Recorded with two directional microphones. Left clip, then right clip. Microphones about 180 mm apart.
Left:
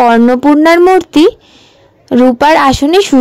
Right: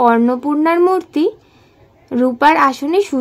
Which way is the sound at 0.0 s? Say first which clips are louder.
Left 6 dB; 40° left (ahead or behind).